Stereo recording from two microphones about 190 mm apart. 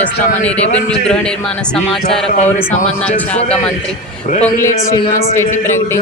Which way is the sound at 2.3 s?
35° left (ahead or behind).